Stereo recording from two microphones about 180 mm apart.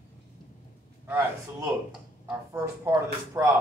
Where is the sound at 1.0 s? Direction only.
10° right (ahead or behind).